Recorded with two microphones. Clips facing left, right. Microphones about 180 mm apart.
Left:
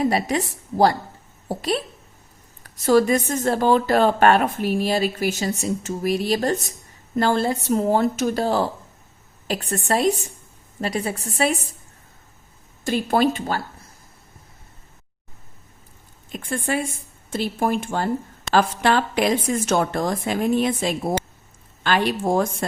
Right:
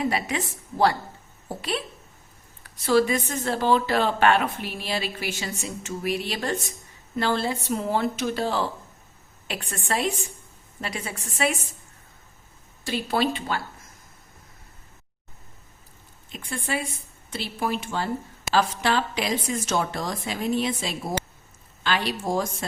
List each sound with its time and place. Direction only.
0.0 s a woman's voice: 40° left (ahead or behind)
1.5 s a woman's voice: 40° left (ahead or behind)
12.8 s a woman's voice: 45° left (ahead or behind)
16.3 s speech: 50° left (ahead or behind)